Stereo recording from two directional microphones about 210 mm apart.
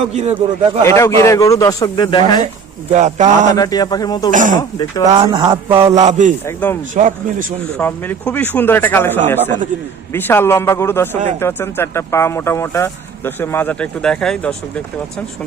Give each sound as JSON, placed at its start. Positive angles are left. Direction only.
{"t": 0.1, "sound": "a man's voice", "side_deg": -30}
{"t": 0.9, "sound": "speech", "side_deg": 15}
{"t": 2.9, "sound": "a man's voice", "side_deg": -35}
{"t": 3.5, "sound": "speech", "side_deg": 15}
{"t": 4.3, "sound": "a man's voice", "side_deg": -40}
{"t": 6.4, "sound": "speech", "side_deg": 10}
{"t": 6.9, "sound": "a man's voice", "side_deg": -40}
{"t": 7.8, "sound": "speech", "side_deg": 10}